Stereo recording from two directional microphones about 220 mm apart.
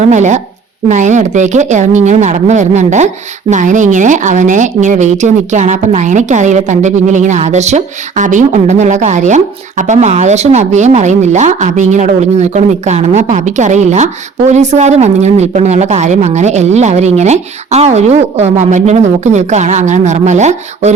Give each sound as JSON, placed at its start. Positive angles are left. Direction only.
{"t": 0.0, "sound": "speech", "side_deg": -35}